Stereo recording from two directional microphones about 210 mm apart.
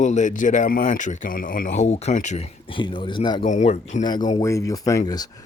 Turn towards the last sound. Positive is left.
turn(degrees=20)  # may be behind; listen again after turning